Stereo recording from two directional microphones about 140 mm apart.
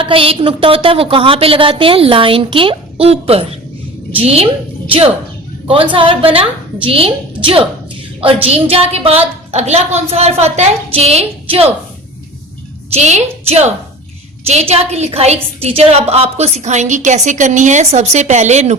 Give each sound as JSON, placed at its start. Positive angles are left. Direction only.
{"t": 0.0, "sound": "a woman's voice", "side_deg": -40}
{"t": 12.9, "sound": "a woman's voice", "side_deg": -55}